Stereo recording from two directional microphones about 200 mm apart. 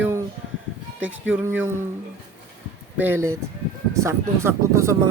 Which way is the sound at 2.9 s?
10° right (ahead or behind).